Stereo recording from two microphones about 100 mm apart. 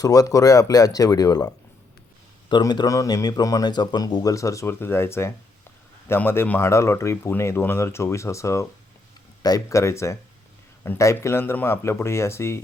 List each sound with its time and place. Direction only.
0.0 s speech: 35° left (ahead or behind)
2.5 s speech: 45° left (ahead or behind); by 12.5 s 30° left (ahead or behind)